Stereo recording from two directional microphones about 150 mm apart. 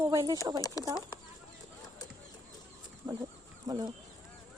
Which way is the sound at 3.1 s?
35° right (ahead or behind).